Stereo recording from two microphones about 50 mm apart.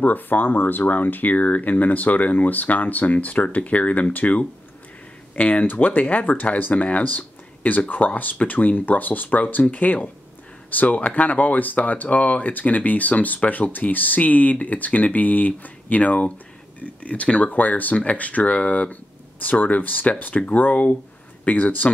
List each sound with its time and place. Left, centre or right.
0.0 s speech: left